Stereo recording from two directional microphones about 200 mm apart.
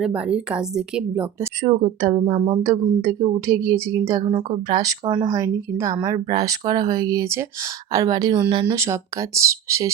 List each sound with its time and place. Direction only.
0.0 s speech: 5° right (ahead or behind)
1.6 s a woman's voice: 20° right (ahead or behind)